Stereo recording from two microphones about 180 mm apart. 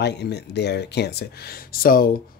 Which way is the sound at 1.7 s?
55° left (ahead or behind).